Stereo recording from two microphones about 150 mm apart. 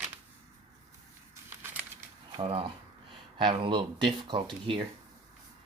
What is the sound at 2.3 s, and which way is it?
Speech, 40° right (ahead or behind).